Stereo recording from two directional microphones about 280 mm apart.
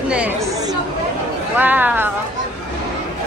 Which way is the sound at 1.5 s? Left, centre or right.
Centre.